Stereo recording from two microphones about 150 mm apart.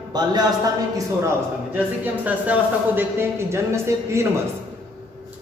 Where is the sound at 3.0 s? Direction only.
15° right (ahead or behind).